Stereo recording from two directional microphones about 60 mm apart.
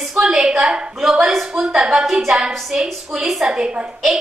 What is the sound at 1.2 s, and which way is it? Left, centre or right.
A woman's voice, centre.